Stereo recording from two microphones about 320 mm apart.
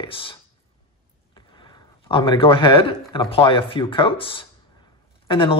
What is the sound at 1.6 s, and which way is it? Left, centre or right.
Speech, centre.